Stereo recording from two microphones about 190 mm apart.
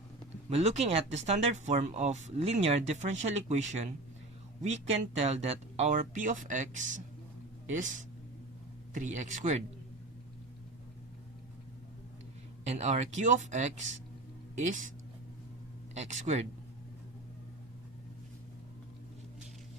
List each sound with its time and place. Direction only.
0.5 s speech: 35° right (ahead or behind)
12.6 s speech: 35° right (ahead or behind)
16.0 s speech: 35° right (ahead or behind)